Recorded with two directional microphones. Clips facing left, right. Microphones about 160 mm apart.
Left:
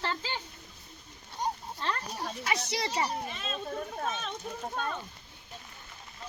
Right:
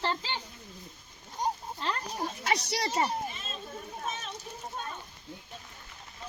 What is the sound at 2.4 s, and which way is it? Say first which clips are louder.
Speech: right 1 dB; 40° right (ahead or behind).